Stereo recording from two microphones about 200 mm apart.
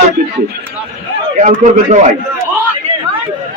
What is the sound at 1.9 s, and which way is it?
Speech, 35° right (ahead or behind).